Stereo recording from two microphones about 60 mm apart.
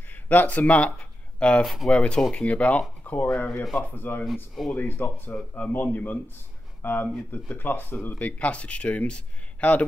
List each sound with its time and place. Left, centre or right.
0.1 s speech: left
0.9 s a sound: centre
1.9 s speech: centre